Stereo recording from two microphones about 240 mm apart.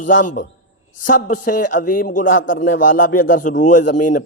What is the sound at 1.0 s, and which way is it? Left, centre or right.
A man's voice, left.